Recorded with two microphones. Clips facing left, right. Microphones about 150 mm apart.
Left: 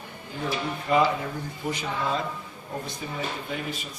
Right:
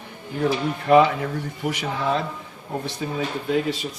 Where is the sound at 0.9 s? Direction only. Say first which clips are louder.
Right 7 dB; 65° right (ahead or behind).